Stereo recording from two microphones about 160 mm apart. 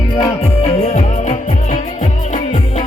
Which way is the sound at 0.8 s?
45° left (ahead or behind).